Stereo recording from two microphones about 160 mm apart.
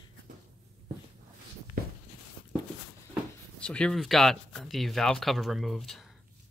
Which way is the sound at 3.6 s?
5° left (ahead or behind).